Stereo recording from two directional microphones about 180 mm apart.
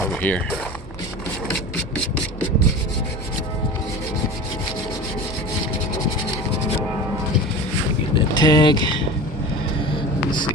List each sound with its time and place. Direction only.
0.0 s speech: 5° left (ahead or behind)
8.1 s boat: 25° left (ahead or behind)